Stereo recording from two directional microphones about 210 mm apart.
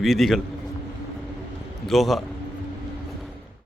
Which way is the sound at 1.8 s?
Centre (ahead or behind).